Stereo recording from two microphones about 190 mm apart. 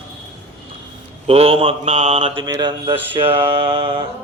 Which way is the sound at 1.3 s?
30° right (ahead or behind).